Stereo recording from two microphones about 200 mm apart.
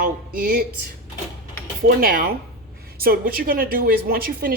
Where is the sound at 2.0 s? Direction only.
45° right (ahead or behind).